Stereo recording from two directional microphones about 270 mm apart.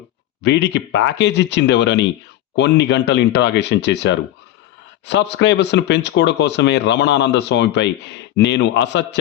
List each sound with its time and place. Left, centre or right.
0.4 s speech: left